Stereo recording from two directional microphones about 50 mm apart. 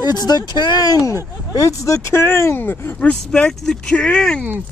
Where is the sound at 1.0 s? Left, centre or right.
Left.